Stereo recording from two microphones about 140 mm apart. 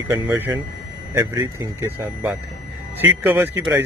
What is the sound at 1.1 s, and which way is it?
A man's voice, 25° right (ahead or behind).